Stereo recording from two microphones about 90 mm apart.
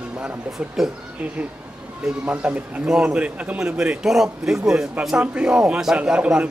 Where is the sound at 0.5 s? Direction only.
5° right (ahead or behind).